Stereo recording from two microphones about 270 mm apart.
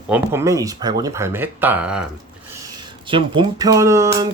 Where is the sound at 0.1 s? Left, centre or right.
Centre.